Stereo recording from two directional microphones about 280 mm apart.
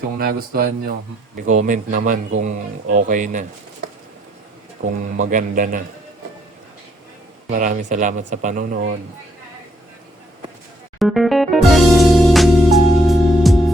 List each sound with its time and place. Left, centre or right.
0.2 s speech: right
5.3 s speech: right
7.4 s speech: right
11.0 s music: centre